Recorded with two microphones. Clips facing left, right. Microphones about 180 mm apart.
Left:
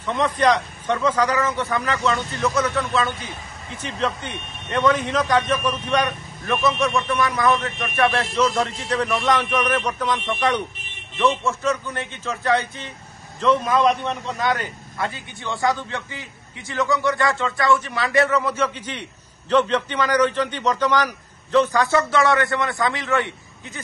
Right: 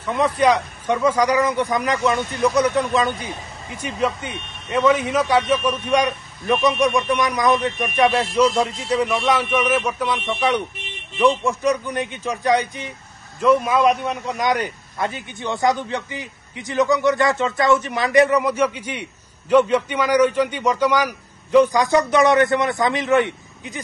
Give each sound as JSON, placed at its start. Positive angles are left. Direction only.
{"t": 0.0, "sound": "a man's voice", "side_deg": -10}